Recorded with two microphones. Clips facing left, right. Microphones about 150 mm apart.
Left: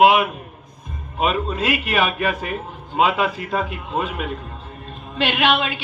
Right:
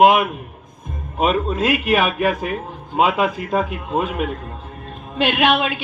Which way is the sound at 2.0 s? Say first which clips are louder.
Right 3 dB; 15° right (ahead or behind).